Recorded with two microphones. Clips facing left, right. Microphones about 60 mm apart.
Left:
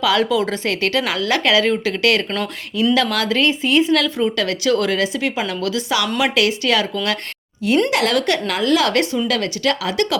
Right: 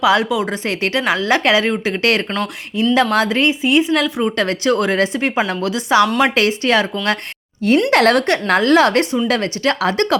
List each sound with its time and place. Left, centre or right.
0.0 s speech: right
7.9 s a woman's voice: right